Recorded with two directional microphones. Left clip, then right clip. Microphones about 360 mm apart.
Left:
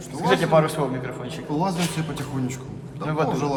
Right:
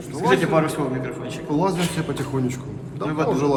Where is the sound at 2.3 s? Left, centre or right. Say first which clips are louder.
Right 5 dB; centre.